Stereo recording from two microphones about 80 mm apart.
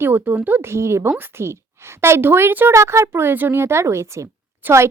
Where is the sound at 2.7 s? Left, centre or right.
Right.